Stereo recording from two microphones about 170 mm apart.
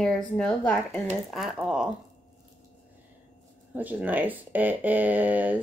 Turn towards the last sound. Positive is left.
turn(degrees=-10)  # may be behind; listen again after turning